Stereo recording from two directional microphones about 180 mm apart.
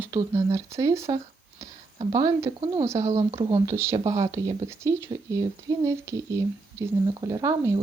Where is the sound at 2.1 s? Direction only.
20° right (ahead or behind).